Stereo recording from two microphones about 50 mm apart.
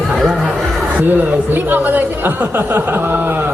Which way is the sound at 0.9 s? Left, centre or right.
Right.